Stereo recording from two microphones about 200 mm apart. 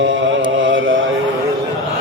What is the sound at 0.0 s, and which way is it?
Mantra, 70° right (ahead or behind).